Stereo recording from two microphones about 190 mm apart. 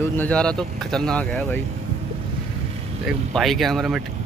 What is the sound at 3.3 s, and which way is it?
Speech, centre (ahead or behind).